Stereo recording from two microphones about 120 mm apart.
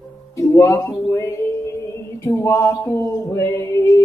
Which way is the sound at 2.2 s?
20° left (ahead or behind).